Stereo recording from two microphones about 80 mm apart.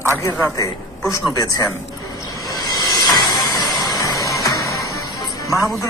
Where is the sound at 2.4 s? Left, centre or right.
Left.